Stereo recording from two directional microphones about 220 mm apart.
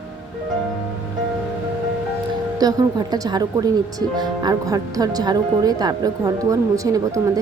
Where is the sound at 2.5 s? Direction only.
15° right (ahead or behind).